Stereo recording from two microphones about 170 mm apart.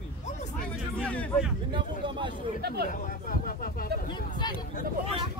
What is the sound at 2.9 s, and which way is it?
Speech, 55° left (ahead or behind).